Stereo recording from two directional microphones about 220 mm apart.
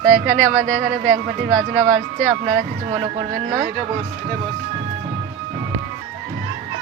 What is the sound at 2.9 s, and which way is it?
Speech, 20° right (ahead or behind).